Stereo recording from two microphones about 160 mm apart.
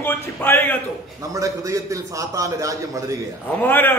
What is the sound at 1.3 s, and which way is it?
A man's voice, 20° right (ahead or behind).